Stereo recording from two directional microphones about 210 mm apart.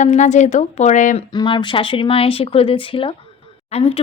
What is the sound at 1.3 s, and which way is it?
Speech, 20° left (ahead or behind).